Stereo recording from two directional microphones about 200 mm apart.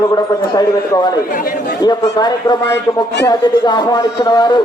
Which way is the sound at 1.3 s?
45° left (ahead or behind).